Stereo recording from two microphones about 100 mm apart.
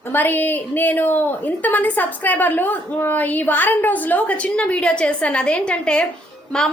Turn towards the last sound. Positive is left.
turn(degrees=10)  # may be behind; listen again after turning